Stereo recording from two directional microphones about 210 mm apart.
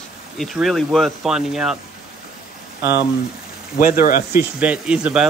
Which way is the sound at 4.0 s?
40° left (ahead or behind).